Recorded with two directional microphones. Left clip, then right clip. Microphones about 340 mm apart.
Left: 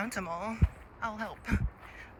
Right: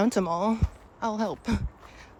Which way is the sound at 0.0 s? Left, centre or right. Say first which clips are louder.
Right 10 dB; centre.